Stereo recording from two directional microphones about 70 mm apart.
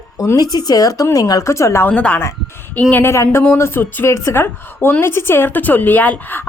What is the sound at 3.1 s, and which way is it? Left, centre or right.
A woman's voice, left.